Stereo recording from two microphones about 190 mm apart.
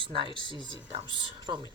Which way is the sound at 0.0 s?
25° right (ahead or behind).